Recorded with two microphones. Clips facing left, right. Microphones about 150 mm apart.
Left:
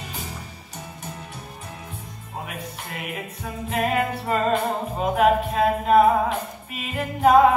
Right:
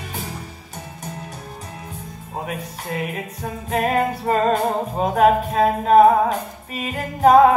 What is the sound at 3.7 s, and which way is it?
Speech, 40° right (ahead or behind).